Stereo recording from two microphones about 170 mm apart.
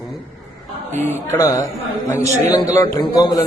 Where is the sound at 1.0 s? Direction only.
15° left (ahead or behind).